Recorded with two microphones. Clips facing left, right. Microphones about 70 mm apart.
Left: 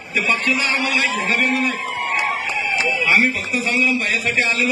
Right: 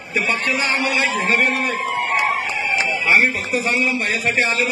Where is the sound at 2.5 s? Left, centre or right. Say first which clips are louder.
Even; right.